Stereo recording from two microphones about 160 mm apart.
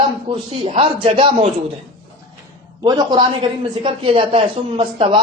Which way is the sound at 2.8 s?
25° right (ahead or behind).